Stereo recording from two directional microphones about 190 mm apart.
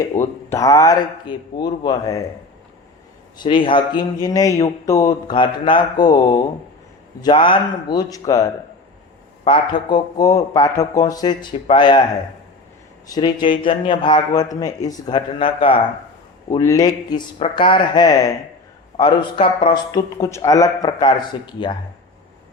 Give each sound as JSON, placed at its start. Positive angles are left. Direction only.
{"t": 0.0, "sound": "speech", "side_deg": 15}
{"t": 3.3, "sound": "a man's voice", "side_deg": 25}
{"t": 13.1, "sound": "a man's voice", "side_deg": 20}